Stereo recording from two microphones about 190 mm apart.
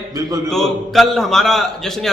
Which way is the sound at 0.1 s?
15° right (ahead or behind).